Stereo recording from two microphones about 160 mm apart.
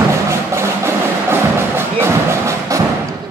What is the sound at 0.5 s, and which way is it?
Music, 15° right (ahead or behind).